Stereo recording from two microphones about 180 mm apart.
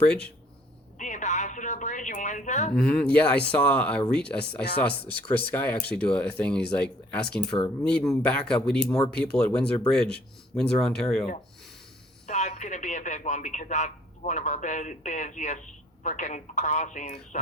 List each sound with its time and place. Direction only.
0.9 s telephone: 45° left (ahead or behind)
2.7 s speech: 5° left (ahead or behind)
8.8 s speech: 20° left (ahead or behind)
9.1 s speech: 5° left (ahead or behind)
12.3 s speech: 40° left (ahead or behind)